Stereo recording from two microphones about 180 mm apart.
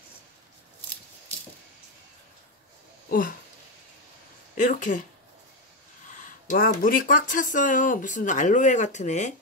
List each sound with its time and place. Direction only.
3.1 s speech: 50° left (ahead or behind)
4.6 s speech: 45° left (ahead or behind)
6.1 s speech: 50° left (ahead or behind)